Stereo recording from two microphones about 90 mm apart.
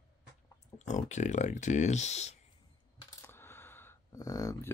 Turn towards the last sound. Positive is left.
turn(degrees=40)  # may be behind; listen again after turning